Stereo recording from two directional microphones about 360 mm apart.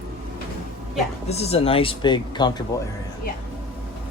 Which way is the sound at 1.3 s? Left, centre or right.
Centre.